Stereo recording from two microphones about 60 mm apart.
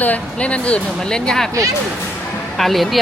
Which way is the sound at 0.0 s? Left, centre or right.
Left.